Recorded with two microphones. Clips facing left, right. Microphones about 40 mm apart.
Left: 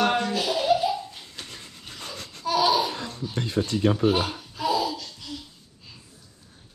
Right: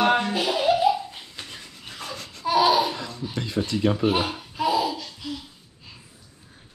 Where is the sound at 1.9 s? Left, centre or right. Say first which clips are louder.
Right 3 dB; right.